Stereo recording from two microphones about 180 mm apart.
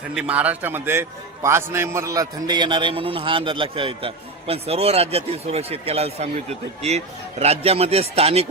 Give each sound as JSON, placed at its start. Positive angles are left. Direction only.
{"t": 0.1, "sound": "a man's voice", "side_deg": -5}